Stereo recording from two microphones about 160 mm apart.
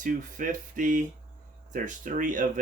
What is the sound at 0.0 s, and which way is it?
Speech, 55° right (ahead or behind).